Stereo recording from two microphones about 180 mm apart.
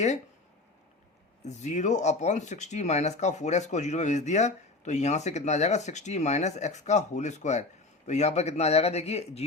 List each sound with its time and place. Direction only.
1.5 s speech: 40° left (ahead or behind)